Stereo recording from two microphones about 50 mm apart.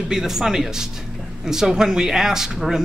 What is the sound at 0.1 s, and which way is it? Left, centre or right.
A man's voice, centre.